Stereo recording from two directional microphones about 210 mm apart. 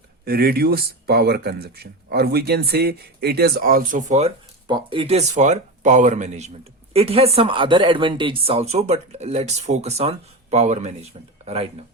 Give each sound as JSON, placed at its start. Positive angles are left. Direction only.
{"t": 0.3, "sound": "speech", "side_deg": -45}
{"t": 4.7, "sound": "speech", "side_deg": -25}